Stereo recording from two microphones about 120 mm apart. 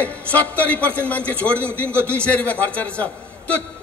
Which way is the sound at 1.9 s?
20° right (ahead or behind).